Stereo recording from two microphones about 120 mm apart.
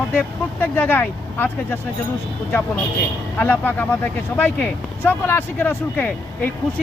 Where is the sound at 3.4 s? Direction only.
15° left (ahead or behind).